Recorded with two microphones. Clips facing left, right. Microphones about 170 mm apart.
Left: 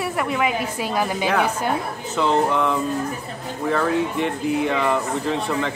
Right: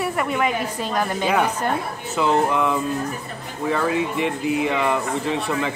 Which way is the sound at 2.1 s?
5° right (ahead or behind).